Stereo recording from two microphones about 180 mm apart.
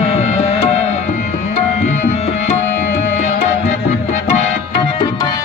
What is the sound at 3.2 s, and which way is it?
Music, 40° left (ahead or behind).